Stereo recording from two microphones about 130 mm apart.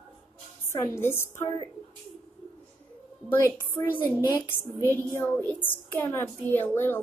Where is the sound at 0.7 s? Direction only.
20° left (ahead or behind).